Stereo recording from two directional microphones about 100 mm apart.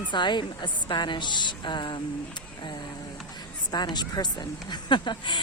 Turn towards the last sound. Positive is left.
turn(degrees=50)  # may be behind; listen again after turning